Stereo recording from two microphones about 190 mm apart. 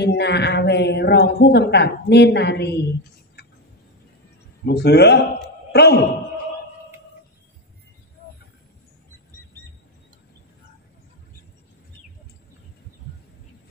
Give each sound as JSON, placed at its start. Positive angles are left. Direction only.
{"t": 0.0, "sound": "a woman's voice", "side_deg": 60}
{"t": 4.6, "sound": "a woman's voice", "side_deg": 60}